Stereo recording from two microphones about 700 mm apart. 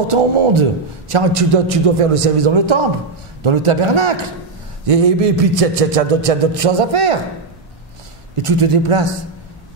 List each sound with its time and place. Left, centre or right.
0.1 s a man's voice: right
8.4 s a man's voice: right